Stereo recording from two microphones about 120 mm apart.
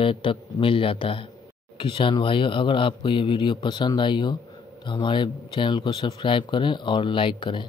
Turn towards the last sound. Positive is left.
turn(degrees=40)  # may be behind; listen again after turning